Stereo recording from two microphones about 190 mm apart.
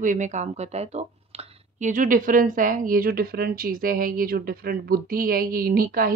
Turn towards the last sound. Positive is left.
turn(degrees=-50)  # may be behind; listen again after turning